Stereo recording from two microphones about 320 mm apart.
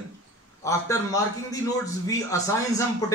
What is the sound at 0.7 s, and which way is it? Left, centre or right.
A man's voice, centre.